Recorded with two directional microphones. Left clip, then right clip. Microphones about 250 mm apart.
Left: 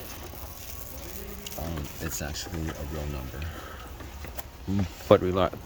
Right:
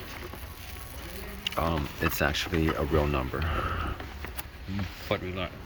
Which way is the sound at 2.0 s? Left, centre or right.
Right.